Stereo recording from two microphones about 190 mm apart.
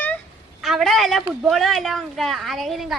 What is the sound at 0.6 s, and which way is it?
A woman's voice, centre (ahead or behind).